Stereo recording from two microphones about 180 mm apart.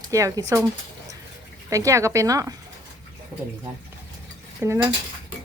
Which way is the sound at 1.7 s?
15° right (ahead or behind).